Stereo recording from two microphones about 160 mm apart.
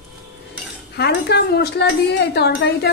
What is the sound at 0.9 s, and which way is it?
A woman's voice, 85° left.